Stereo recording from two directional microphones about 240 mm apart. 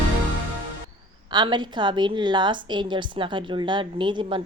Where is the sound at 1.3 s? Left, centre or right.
Centre.